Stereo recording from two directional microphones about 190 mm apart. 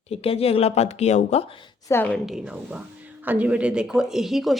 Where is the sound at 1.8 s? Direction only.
10° left (ahead or behind).